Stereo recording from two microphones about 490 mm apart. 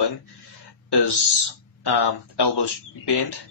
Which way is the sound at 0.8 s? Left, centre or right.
Left.